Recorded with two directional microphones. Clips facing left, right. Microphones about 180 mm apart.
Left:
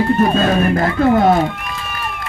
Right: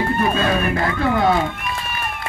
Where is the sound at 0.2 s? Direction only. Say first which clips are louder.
Left 5 dB; 40° left (ahead or behind).